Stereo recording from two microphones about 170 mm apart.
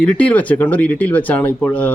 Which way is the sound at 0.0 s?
5° left (ahead or behind).